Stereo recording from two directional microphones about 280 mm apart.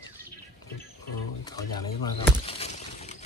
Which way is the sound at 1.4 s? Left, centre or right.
Centre.